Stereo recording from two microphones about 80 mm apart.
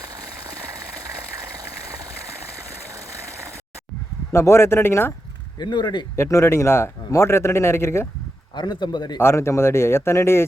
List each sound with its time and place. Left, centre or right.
2.9 s a sound: right
4.3 s a man's voice: left
5.5 s speech: left
6.1 s a man's voice: left
8.5 s a man's voice: left
9.1 s a man's voice: left